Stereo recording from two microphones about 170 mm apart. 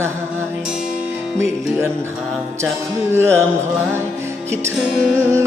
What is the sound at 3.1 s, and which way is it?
Music, 15° right (ahead or behind).